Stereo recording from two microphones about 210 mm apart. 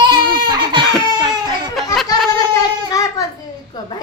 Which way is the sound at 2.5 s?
15° left (ahead or behind).